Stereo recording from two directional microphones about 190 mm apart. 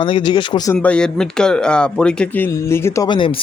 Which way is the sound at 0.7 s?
5° left (ahead or behind).